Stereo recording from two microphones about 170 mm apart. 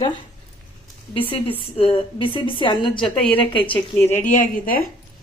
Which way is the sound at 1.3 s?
30° left (ahead or behind).